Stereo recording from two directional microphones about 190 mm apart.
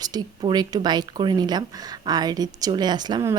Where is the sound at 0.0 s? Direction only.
20° right (ahead or behind).